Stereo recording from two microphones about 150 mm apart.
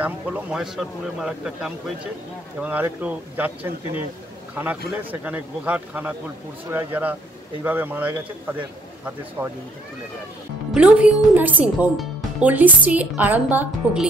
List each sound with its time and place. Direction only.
0.0 s a man's voice: 10° right (ahead or behind)
10.7 s speech: 10° right (ahead or behind)